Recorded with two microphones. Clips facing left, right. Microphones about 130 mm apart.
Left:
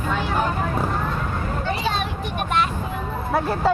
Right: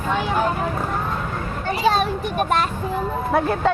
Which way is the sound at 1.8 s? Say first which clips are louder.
Right 10 dB; 40° right (ahead or behind).